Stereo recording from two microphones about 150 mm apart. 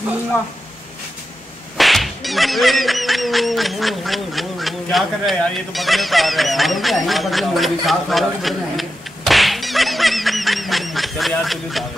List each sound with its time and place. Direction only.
1.8 s whip: centre (ahead or behind)